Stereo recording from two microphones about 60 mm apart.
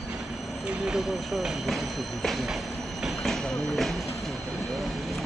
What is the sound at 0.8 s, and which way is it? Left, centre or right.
Speech, centre.